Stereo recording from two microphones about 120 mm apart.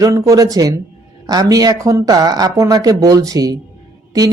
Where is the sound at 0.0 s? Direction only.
30° right (ahead or behind).